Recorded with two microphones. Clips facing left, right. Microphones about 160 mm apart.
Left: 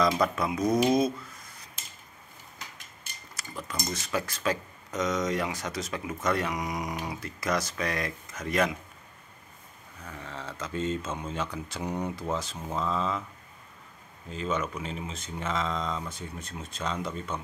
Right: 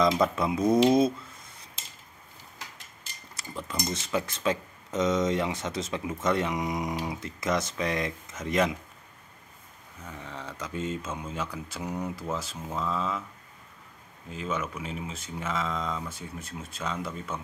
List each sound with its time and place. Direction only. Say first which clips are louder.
0.0 s speech: right 2 dB; 20° right (ahead or behind)
3.3 s cutlery: right 2 dB; 25° right (ahead or behind)
3.9 s speech: right 1 dB; 25° right (ahead or behind)
10.0 s speech: even; 15° right (ahead or behind)
14.3 s speech: left 2 dB; 5° right (ahead or behind)